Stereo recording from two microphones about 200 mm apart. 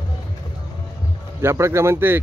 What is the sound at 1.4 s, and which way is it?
Speech, 15° right (ahead or behind).